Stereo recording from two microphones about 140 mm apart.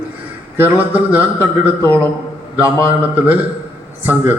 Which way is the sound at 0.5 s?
15° right (ahead or behind).